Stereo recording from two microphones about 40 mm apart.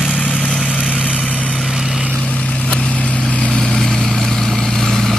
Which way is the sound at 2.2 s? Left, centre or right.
Left.